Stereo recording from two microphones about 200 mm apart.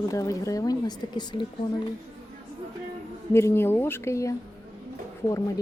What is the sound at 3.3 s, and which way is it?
Speech, 15° left (ahead or behind).